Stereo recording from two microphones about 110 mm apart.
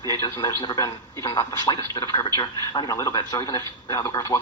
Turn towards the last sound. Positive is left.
turn(degrees=30)  # may be behind; listen again after turning